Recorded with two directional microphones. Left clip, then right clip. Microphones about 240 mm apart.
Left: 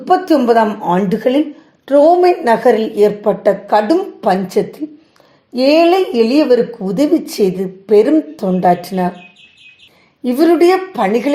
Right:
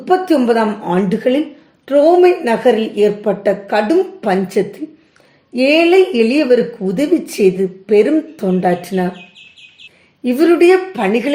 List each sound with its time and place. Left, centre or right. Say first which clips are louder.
0.0 s a woman's voice: left 1 dB; centre
10.2 s a woman's voice: even; centre